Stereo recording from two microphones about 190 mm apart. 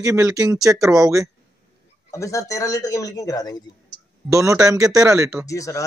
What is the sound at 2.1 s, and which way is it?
Speech, 15° left (ahead or behind).